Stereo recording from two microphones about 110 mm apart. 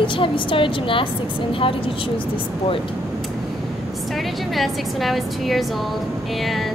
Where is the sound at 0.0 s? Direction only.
50° left (ahead or behind).